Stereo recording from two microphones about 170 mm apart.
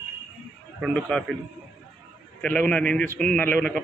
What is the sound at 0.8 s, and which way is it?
Speech, 5° left (ahead or behind).